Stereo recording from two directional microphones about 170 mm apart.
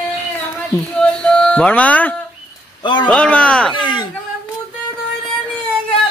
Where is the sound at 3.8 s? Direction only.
30° left (ahead or behind).